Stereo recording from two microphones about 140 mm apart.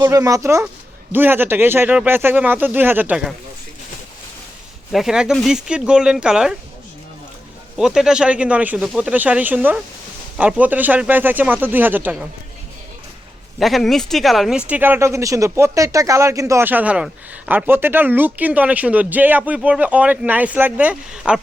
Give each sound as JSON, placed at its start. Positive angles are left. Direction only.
{"t": 0.0, "sound": "speech", "side_deg": -25}
{"t": 4.9, "sound": "speech", "side_deg": 0}
{"t": 7.8, "sound": "speech", "side_deg": -5}
{"t": 13.6, "sound": "speech", "side_deg": 0}